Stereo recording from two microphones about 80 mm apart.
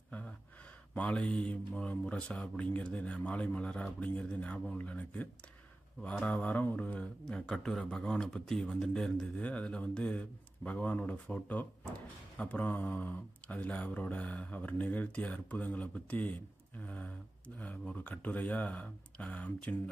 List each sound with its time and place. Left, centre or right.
0.9 s speech: centre